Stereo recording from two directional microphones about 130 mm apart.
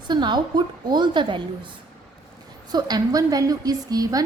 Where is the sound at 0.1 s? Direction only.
35° right (ahead or behind).